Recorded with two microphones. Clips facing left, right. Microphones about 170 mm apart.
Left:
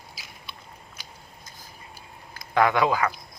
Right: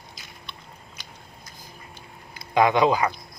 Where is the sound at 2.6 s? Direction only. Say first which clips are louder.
Right 2 dB; 20° right (ahead or behind).